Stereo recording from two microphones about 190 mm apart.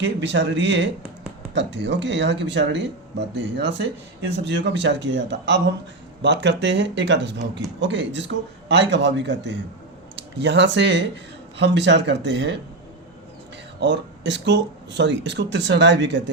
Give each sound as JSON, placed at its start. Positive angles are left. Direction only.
{"t": 0.0, "sound": "speech", "side_deg": -70}
{"t": 13.7, "sound": "speech", "side_deg": -70}